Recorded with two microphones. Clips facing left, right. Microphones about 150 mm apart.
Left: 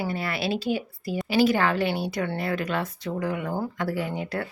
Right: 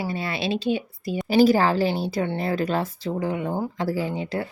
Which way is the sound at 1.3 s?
35° right (ahead or behind).